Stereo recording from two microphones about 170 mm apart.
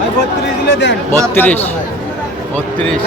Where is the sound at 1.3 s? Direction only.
10° left (ahead or behind).